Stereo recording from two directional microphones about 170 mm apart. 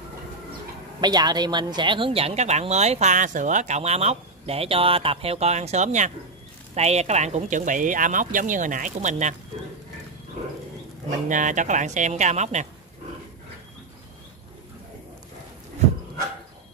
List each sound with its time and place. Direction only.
1.0 s speech: 25° right (ahead or behind); by 9.3 s 45° right (ahead or behind)
11.1 s speech: 50° right (ahead or behind)